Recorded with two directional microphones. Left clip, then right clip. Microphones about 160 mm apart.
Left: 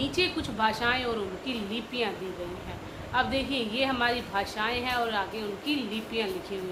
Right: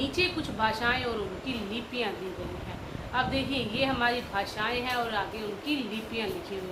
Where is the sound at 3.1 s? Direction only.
45° left (ahead or behind).